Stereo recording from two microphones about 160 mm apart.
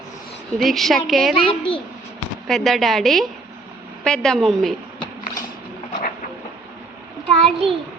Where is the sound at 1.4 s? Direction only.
30° left (ahead or behind).